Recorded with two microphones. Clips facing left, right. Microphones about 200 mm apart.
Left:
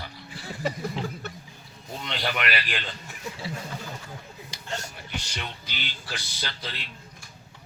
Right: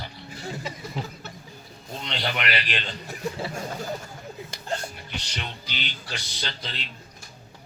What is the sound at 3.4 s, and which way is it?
Speech, 45° right (ahead or behind).